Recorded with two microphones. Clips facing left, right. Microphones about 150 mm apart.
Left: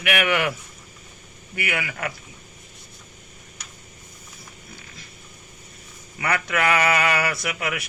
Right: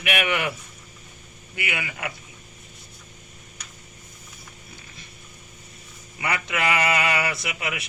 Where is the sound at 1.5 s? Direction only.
20° right (ahead or behind).